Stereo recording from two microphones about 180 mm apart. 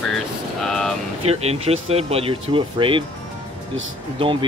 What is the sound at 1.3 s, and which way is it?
Speech, 35° right (ahead or behind).